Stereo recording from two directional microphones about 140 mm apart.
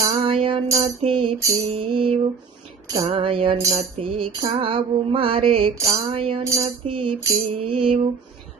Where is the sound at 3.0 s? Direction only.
45° right (ahead or behind).